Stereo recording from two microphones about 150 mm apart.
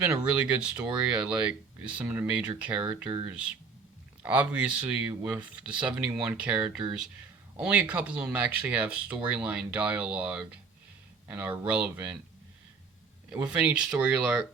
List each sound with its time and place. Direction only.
0.0 s speech: 10° right (ahead or behind)
13.3 s speech: 5° right (ahead or behind)